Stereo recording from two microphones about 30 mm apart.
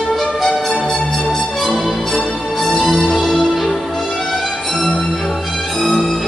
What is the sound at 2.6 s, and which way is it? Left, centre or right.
Music, centre.